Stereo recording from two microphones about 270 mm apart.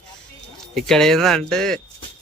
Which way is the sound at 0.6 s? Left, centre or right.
Centre.